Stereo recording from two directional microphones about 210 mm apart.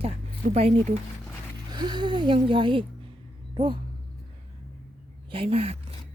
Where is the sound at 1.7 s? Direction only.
20° right (ahead or behind).